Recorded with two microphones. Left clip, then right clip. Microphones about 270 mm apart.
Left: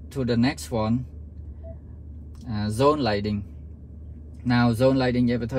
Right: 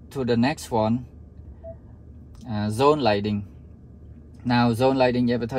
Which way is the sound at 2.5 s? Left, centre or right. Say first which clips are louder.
Right 1 dB; right.